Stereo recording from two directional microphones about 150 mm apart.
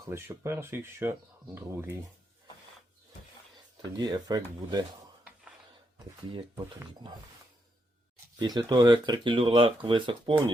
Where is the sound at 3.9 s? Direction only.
30° right (ahead or behind).